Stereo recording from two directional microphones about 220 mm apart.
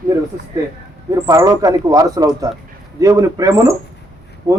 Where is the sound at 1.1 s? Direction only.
15° right (ahead or behind).